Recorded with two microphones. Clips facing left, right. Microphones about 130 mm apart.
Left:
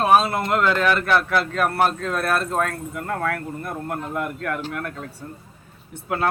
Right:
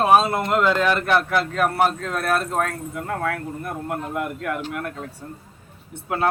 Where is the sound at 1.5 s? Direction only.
5° right (ahead or behind).